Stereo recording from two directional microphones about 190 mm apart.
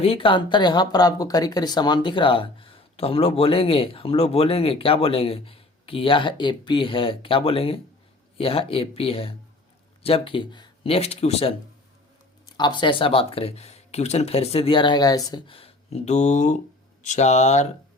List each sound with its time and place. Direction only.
0.0 s speech: 30° left (ahead or behind)
12.5 s speech: 25° left (ahead or behind)